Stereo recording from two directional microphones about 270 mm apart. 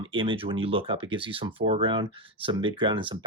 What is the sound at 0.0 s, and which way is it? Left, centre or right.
Speech, centre.